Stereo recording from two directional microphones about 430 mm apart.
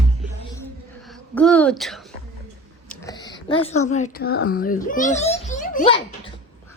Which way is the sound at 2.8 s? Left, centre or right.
Centre.